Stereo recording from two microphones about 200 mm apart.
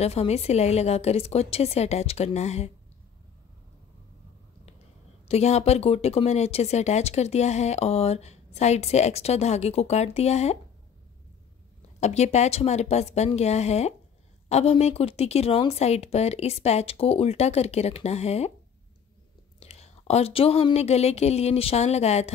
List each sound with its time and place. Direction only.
0.0 s speech: 30° left (ahead or behind)
5.3 s speech: 35° left (ahead or behind)
12.0 s speech: 35° left (ahead or behind)
19.6 s speech: 30° left (ahead or behind)